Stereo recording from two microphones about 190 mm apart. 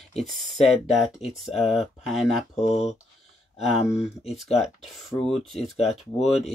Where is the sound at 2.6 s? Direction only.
35° left (ahead or behind).